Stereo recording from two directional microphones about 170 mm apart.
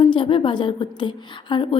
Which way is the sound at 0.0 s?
30° left (ahead or behind).